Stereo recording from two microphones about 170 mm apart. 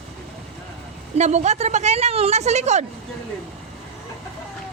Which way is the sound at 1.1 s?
40° right (ahead or behind).